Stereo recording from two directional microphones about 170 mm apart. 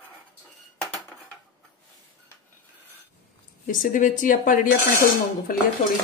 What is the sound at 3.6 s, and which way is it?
Speech, 50° left (ahead or behind).